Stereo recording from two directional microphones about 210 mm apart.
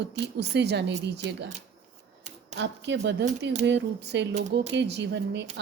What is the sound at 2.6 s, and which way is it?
Speech, 55° right (ahead or behind).